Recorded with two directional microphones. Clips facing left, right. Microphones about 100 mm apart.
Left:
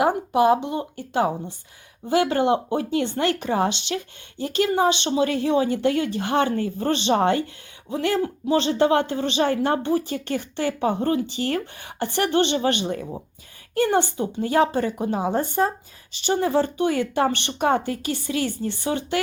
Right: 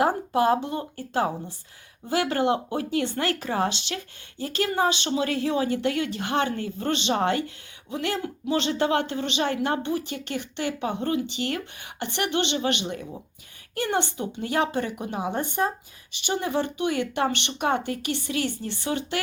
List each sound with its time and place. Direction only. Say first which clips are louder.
0.0 s speech: left 3 dB; 15° left (ahead or behind)